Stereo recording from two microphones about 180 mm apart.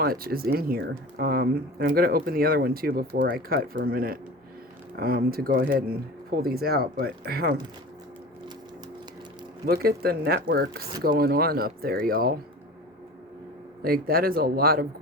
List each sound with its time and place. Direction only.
0.0 s speech: 55° right (ahead or behind)
9.6 s speech: 60° right (ahead or behind)
13.8 s speech: 55° right (ahead or behind)